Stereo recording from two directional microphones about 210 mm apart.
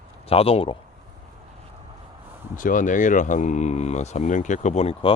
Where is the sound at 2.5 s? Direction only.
40° left (ahead or behind).